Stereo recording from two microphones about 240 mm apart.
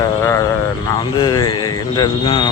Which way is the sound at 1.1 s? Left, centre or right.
Centre.